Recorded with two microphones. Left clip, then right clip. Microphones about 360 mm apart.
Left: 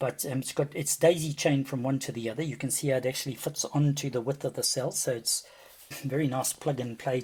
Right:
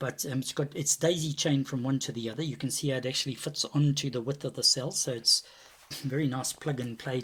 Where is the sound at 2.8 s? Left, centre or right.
Left.